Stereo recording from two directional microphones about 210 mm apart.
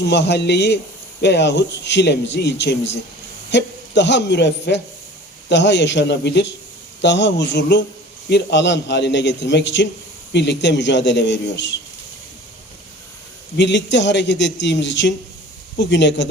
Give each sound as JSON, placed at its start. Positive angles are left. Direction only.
{"t": 0.0, "sound": "speech", "side_deg": 55}
{"t": 13.6, "sound": "speech", "side_deg": 55}